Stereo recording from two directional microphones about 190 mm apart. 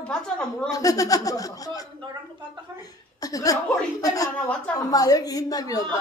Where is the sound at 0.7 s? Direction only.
20° left (ahead or behind).